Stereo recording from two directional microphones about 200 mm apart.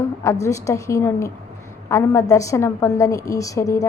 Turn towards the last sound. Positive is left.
turn(degrees=15)  # may be behind; listen again after turning